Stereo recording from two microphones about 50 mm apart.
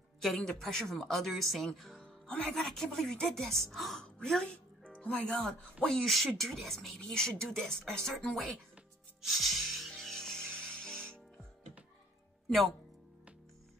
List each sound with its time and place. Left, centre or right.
0.5 s speech: centre
2.2 s a woman's voice: centre
5.3 s speech: centre
9.2 s music: centre